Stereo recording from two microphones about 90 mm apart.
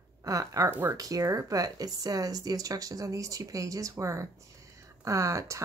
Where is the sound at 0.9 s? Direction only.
40° right (ahead or behind).